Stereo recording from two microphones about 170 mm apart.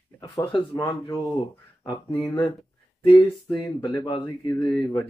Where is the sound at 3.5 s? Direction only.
25° left (ahead or behind).